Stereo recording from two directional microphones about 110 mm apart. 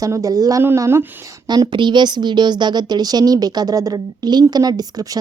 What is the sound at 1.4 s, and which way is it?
A woman's voice, 45° right (ahead or behind).